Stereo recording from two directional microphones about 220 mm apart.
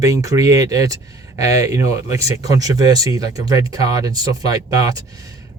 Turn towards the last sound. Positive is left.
turn(degrees=-15)  # may be behind; listen again after turning